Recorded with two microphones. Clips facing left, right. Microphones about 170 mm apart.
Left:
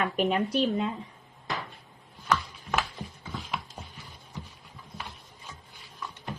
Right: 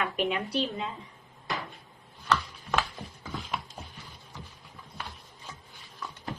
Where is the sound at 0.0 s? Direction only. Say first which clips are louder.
Left 3 dB; 40° left (ahead or behind).